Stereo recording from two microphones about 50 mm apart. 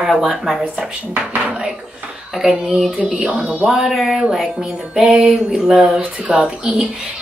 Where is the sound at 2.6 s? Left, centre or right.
Centre.